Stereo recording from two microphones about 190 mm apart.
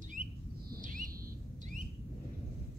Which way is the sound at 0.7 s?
45° right (ahead or behind).